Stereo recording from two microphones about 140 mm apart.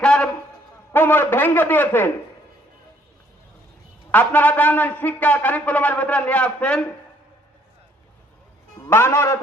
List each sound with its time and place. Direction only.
0.0 s a sound: 5° left (ahead or behind)
0.9 s a man's voice: 15° left (ahead or behind)
4.1 s a man's voice: 10° left (ahead or behind)
8.9 s a man's voice: 15° left (ahead or behind)